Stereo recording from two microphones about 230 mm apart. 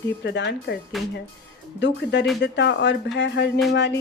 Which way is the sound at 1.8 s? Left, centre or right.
Left.